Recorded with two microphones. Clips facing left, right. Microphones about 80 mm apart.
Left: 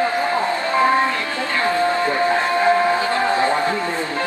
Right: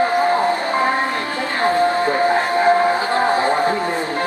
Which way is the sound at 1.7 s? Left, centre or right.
Right.